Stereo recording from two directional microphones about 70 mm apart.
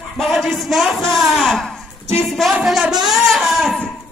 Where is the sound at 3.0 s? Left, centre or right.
Centre.